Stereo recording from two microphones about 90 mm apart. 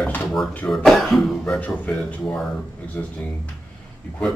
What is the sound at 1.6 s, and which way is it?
A man's voice, 15° left (ahead or behind).